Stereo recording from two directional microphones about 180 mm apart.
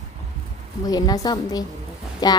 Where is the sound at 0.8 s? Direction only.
20° left (ahead or behind).